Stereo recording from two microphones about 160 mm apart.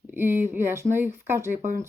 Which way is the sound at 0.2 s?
15° right (ahead or behind).